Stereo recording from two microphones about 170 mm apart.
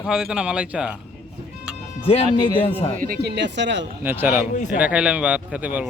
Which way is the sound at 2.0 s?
35° left (ahead or behind).